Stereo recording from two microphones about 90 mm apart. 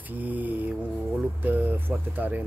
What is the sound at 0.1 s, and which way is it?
Mantra, 20° right (ahead or behind).